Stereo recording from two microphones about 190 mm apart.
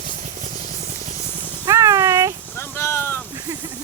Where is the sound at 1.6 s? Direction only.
15° right (ahead or behind).